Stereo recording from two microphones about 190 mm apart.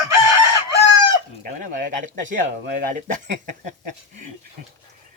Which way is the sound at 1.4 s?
45° right (ahead or behind).